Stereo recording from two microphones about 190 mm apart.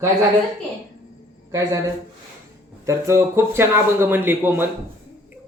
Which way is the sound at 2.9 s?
15° right (ahead or behind).